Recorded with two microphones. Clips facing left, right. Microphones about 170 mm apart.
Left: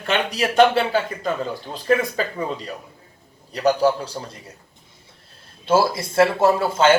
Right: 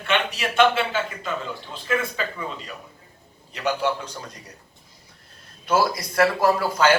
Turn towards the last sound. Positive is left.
turn(degrees=25)  # may be behind; listen again after turning